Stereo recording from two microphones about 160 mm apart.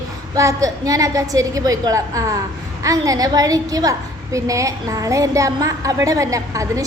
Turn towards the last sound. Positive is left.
turn(degrees=-20)  # may be behind; listen again after turning